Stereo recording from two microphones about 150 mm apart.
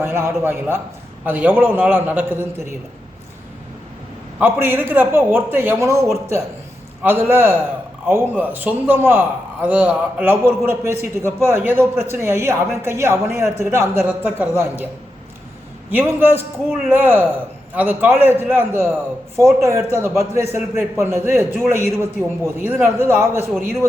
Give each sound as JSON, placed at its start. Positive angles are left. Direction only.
{"t": 0.0, "sound": "a man's voice", "side_deg": -15}
{"t": 4.4, "sound": "a man's voice", "side_deg": -15}
{"t": 15.9, "sound": "a man's voice", "side_deg": -15}